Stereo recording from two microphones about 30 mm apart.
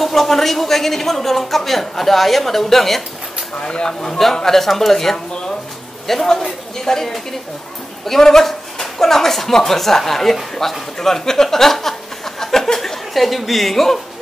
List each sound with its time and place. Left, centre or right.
0.0 s a man's voice: centre
3.5 s speech: left
3.8 s a man's voice: centre
4.6 s a man's voice: centre
6.2 s a man's voice: centre
12.4 s a sound: centre
12.7 s speech: centre